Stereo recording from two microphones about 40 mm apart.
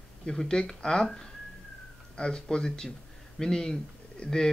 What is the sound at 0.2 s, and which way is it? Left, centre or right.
Speech, centre.